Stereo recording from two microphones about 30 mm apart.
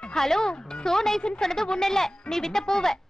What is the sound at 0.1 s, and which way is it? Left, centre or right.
A woman's voice, centre.